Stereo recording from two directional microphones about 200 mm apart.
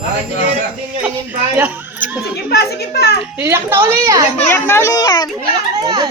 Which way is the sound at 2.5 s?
55° left (ahead or behind).